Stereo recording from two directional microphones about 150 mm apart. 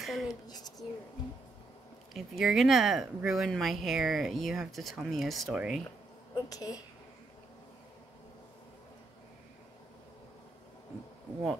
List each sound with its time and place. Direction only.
0.0 s a sound: centre (ahead or behind)
0.5 s speech: 25° left (ahead or behind)
2.1 s speech: centre (ahead or behind)
6.3 s a woman's voice: 25° left (ahead or behind)